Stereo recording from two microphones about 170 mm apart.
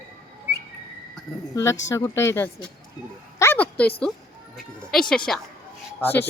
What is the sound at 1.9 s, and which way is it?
Speech, 20° left (ahead or behind).